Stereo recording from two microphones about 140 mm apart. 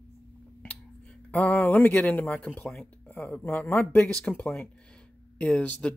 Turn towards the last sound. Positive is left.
turn(degrees=10)  # may be behind; listen again after turning